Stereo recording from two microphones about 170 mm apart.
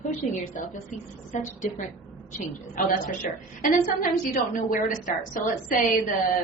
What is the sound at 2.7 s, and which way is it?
Speech, 50° left (ahead or behind).